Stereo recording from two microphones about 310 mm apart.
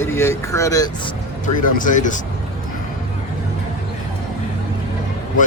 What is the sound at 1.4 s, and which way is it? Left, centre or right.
Speech, left.